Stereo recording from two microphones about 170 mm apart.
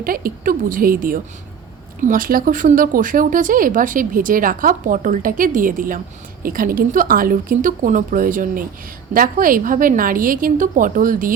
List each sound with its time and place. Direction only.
0.0 s a woman's voice: 60° right (ahead or behind)